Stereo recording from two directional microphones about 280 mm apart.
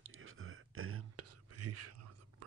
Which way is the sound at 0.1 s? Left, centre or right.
Right.